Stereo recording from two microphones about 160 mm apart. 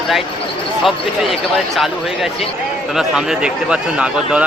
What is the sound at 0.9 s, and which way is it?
A man's voice, centre (ahead or behind).